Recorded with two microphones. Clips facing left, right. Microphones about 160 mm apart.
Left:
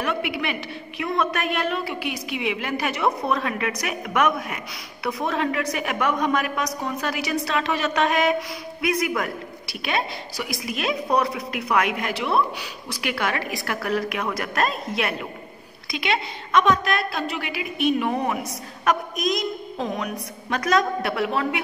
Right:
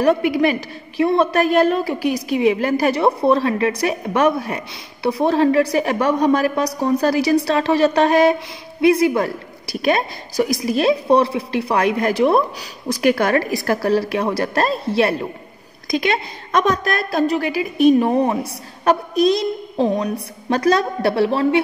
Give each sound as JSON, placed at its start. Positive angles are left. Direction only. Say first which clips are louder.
{"t": 0.0, "sound": "a woman's voice", "louder": "right 11 dB", "side_deg": -40}